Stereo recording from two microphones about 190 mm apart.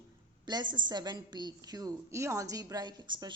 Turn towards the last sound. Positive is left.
turn(degrees=-25)  # may be behind; listen again after turning